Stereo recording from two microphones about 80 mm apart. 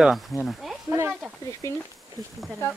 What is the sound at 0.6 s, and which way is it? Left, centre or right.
Snake, centre.